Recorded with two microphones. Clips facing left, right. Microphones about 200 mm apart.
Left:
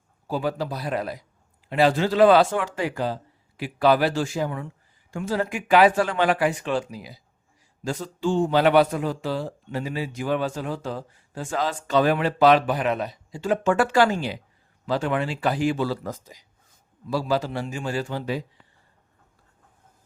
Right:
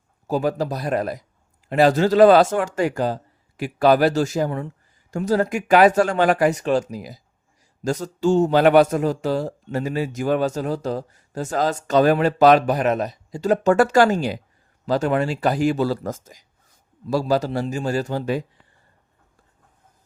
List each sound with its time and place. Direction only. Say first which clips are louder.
0.3 s a man's voice: right 5 dB; 45° right (ahead or behind)